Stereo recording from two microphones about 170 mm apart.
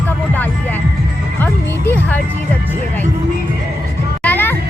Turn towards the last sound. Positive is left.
turn(degrees=10)  # may be behind; listen again after turning